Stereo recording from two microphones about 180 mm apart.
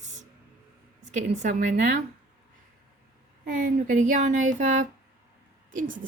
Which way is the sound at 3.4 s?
50° right (ahead or behind).